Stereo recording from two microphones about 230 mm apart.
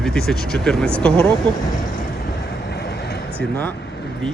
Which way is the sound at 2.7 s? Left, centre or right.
Left.